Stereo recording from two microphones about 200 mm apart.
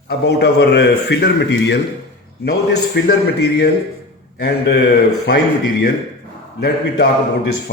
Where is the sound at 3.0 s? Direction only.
55° left (ahead or behind).